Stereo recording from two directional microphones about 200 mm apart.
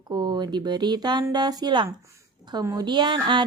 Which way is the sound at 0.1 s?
20° right (ahead or behind).